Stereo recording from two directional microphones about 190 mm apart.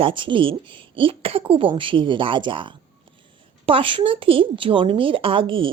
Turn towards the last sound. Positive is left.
turn(degrees=-25)  # may be behind; listen again after turning